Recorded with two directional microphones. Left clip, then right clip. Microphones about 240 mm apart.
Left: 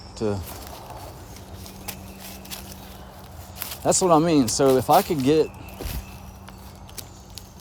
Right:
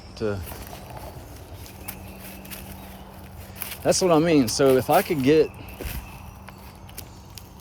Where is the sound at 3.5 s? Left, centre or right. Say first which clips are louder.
Even; centre.